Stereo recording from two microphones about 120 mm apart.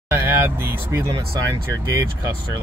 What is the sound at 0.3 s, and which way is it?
Speech, 15° right (ahead or behind).